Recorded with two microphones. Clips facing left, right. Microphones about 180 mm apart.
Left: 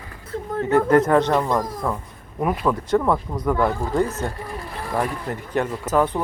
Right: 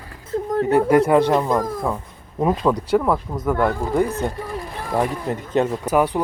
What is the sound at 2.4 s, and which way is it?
Speech, 25° right (ahead or behind).